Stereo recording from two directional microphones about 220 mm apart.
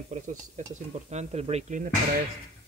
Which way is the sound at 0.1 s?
30° right (ahead or behind).